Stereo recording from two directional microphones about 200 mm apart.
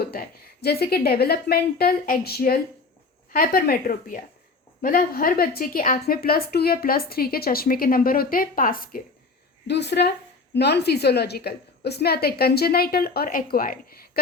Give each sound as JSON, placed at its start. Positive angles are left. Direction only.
{"t": 0.0, "sound": "a woman's voice", "side_deg": 50}
{"t": 9.6, "sound": "a woman's voice", "side_deg": 55}